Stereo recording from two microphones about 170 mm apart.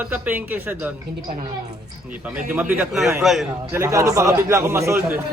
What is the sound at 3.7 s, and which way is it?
A man's voice, 15° right (ahead or behind).